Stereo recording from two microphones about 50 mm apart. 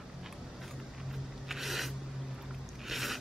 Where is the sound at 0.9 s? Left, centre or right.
Centre.